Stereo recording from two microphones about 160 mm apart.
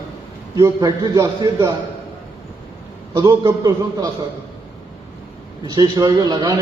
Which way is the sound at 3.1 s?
25° right (ahead or behind).